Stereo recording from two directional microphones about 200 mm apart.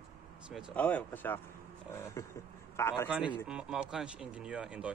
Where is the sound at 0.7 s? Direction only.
10° left (ahead or behind).